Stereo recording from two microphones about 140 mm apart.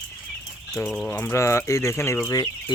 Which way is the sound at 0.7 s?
5° left (ahead or behind).